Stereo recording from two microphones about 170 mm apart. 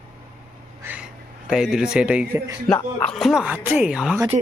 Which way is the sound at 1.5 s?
5° right (ahead or behind).